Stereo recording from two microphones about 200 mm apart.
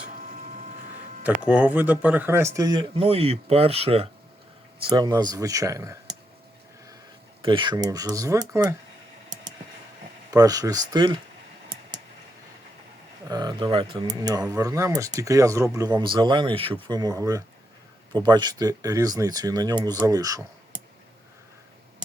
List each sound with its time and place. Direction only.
1.5 s speech: 5° right (ahead or behind); by 4.1 s 30° right (ahead or behind)
4.9 s speech: 20° right (ahead or behind)
7.4 s speech: 25° right (ahead or behind)
10.3 s speech: 20° right (ahead or behind)
13.2 s speech: 20° right (ahead or behind)